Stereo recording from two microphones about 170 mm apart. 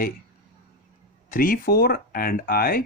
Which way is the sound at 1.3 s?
55° left (ahead or behind).